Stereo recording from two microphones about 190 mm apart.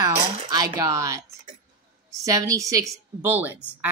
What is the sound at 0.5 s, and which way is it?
Speech, 20° right (ahead or behind).